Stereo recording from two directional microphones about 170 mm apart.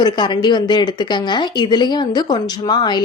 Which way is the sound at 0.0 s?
25° left (ahead or behind).